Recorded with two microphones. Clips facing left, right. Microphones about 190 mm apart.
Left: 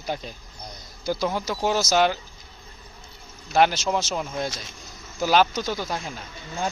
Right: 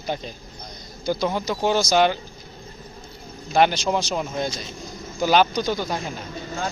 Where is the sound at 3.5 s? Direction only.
Centre (ahead or behind).